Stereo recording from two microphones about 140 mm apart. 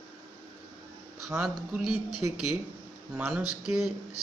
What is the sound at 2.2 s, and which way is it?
A man's voice, 20° right (ahead or behind).